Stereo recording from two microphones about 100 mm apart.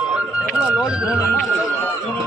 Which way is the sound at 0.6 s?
10° right (ahead or behind).